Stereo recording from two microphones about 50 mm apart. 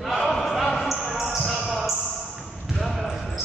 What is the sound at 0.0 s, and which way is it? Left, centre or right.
Basketball bounce, centre.